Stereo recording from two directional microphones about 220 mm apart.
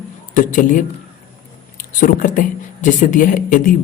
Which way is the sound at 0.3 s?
35° left (ahead or behind).